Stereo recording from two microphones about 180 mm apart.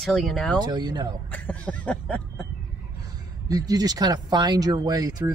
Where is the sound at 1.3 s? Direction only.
10° left (ahead or behind).